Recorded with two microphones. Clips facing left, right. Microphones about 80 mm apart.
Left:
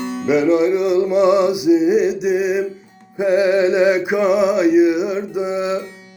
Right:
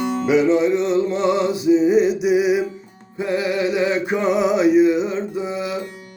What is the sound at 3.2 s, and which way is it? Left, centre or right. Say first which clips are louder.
Music: left 6 dB; left.